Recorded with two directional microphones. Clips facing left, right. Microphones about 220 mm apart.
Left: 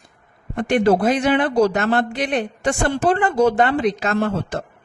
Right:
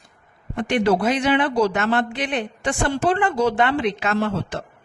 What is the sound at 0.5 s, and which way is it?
A man's voice, 45° left (ahead or behind).